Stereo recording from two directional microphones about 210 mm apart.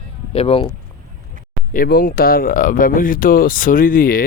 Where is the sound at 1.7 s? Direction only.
45° left (ahead or behind).